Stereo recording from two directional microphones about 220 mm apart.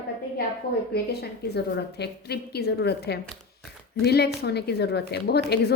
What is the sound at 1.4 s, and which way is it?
A woman's voice, 50° left (ahead or behind).